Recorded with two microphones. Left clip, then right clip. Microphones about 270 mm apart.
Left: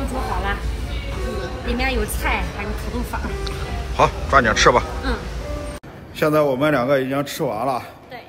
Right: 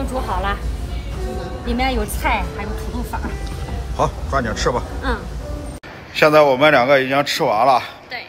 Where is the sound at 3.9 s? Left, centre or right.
Centre.